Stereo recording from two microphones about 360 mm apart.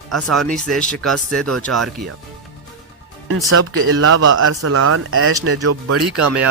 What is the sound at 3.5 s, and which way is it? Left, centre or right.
Speech, right.